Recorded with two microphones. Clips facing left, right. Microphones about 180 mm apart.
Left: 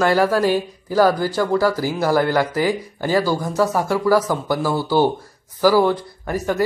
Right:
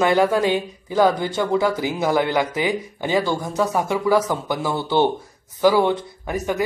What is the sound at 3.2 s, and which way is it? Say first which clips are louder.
Speech: left 3 dB; centre (ahead or behind).